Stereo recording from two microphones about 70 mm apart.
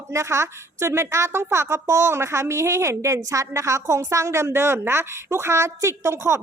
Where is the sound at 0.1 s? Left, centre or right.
Right.